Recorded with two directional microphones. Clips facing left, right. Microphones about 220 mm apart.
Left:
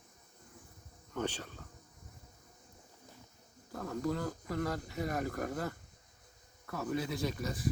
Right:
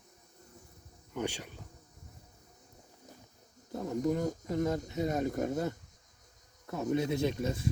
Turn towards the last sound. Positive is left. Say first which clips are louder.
# right 5 dB
turn(degrees=-25)  # may be behind; listen again after turning